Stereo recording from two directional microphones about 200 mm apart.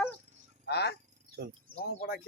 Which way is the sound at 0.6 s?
55° left (ahead or behind).